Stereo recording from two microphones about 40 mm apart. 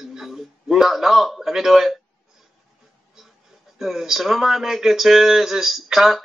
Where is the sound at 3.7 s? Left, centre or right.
Centre.